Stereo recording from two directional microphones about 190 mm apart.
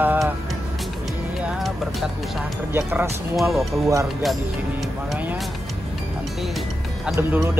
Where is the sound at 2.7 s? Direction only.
10° right (ahead or behind).